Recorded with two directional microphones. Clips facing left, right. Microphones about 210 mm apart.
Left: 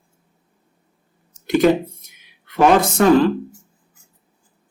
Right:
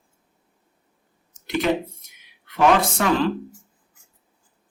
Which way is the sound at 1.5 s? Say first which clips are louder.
Left 7 dB; 45° left (ahead or behind).